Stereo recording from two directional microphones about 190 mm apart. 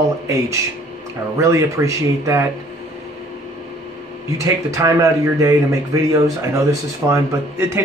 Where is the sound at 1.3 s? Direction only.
15° right (ahead or behind).